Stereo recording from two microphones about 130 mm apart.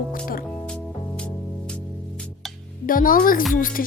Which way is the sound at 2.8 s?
90° left.